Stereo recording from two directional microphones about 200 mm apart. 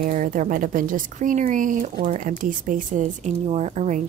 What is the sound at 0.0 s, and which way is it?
A woman's voice, 40° right (ahead or behind).